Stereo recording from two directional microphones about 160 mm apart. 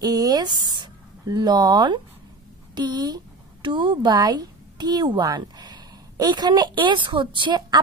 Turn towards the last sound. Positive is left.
turn(degrees=-30)  # may be behind; listen again after turning